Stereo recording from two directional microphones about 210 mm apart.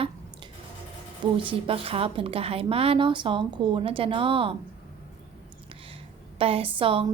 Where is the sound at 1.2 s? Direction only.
25° right (ahead or behind).